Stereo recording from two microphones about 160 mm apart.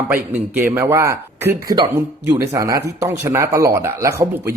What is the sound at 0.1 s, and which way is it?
A man's voice, 10° right (ahead or behind).